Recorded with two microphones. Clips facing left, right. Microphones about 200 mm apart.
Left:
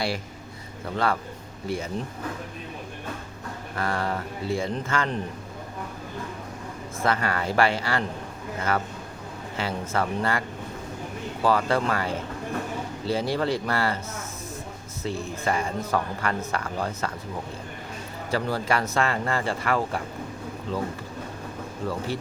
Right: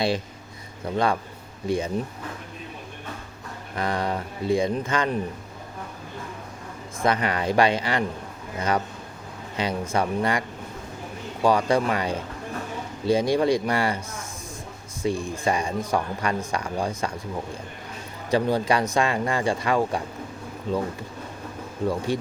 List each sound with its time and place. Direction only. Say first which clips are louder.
0.9 s speech: right 2 dB; 15° right (ahead or behind)
3.8 s speech: right 2 dB; 20° right (ahead or behind)
7.0 s speech: right 2 dB; 20° right (ahead or behind)
11.4 s speech: right 2 dB; 15° right (ahead or behind)
15.0 s speech: right 4 dB; 15° right (ahead or behind)
18.3 s speech: right 4 dB; 20° right (ahead or behind)
21.8 s speech: right 5 dB; 15° right (ahead or behind)